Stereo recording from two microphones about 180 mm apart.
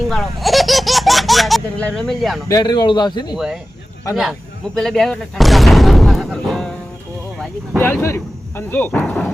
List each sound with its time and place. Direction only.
0.1 s baby laughter: centre (ahead or behind)
2.5 s a man's voice: 20° left (ahead or behind)
3.3 s speech: 5° right (ahead or behind)
8.0 s speech: 15° left (ahead or behind)